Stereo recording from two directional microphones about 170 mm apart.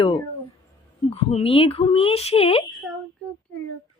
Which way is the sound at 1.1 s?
35° left (ahead or behind).